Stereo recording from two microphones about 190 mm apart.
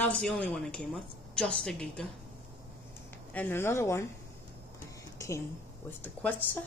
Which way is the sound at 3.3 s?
10° left (ahead or behind).